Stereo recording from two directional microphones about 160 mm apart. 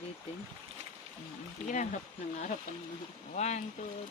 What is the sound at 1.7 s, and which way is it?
Speech, 50° left (ahead or behind).